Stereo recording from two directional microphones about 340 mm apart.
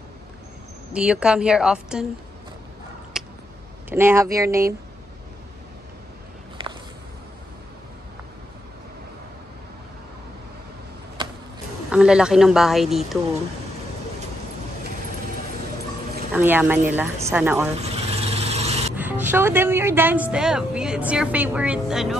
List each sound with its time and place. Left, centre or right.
0.9 s speech: centre
3.1 s a sound: centre
3.9 s speech: centre
11.9 s speech: centre
16.3 s speech: centre
17.8 s vehicle: centre
18.9 s speech: centre